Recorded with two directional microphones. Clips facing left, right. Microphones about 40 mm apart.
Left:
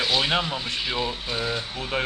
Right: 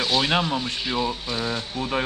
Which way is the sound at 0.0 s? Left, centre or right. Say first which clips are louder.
Right 1 dB; centre.